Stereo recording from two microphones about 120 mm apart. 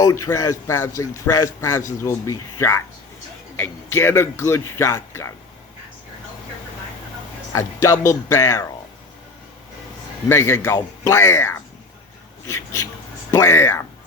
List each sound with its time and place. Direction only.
0.0 s speech: 25° left (ahead or behind)
7.5 s speech: 25° left (ahead or behind)
10.2 s speech: 25° left (ahead or behind)